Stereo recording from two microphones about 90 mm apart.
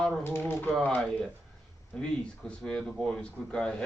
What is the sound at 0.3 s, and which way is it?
Tuning fork, 25° left (ahead or behind).